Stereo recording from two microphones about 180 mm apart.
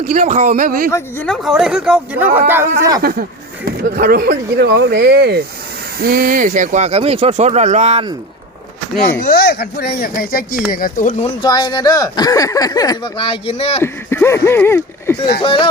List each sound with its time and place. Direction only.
0.0 s speech: 45° right (ahead or behind)
0.9 s speech: 15° left (ahead or behind)
1.3 s speech: centre (ahead or behind)
3.0 s speech: 60° right (ahead or behind); by 8.0 s 40° right (ahead or behind)
9.0 s speech: 55° left (ahead or behind)
11.4 s speech: 20° left (ahead or behind)
13.8 s speech: 15° left (ahead or behind)
15.4 s speech: 30° left (ahead or behind)